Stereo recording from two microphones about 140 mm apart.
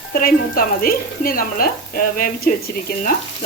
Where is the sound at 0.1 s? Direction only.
90° left.